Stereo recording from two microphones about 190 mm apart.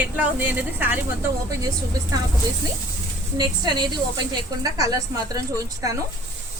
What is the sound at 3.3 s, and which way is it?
A woman's voice, 25° right (ahead or behind).